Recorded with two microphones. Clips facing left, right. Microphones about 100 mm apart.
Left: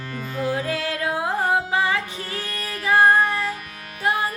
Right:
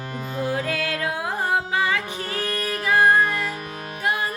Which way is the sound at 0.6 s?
25° left (ahead or behind).